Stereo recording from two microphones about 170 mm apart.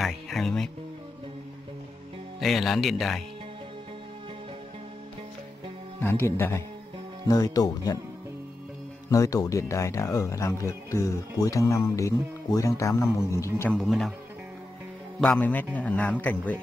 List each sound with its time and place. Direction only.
0.0 s music: centre (ahead or behind)
2.4 s speech: centre (ahead or behind)
5.9 s speech: 15° left (ahead or behind)
9.1 s speech: 20° left (ahead or behind)
13.7 s speech: centre (ahead or behind)
15.1 s speech: 5° left (ahead or behind)